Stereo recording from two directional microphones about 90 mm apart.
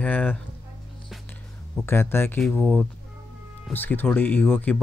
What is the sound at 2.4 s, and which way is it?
Speech, centre (ahead or behind).